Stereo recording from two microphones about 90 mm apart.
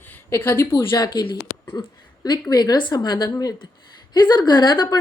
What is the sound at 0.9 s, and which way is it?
A woman's voice, 50° left (ahead or behind).